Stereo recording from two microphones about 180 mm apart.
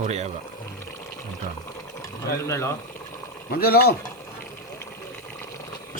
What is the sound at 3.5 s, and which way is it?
Speech, 55° left (ahead or behind).